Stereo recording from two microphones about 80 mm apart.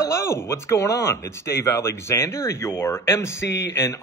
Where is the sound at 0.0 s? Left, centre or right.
Left.